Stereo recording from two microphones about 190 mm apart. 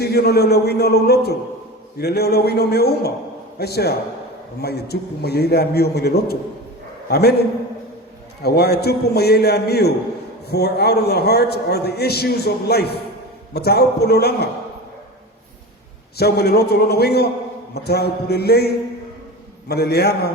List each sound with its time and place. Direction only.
0.0 s a man's voice: 55° left (ahead or behind)
8.4 s a man's voice: 55° left (ahead or behind)
16.1 s a man's voice: 55° left (ahead or behind)